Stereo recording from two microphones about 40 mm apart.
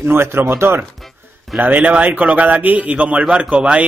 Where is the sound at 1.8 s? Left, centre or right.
Right.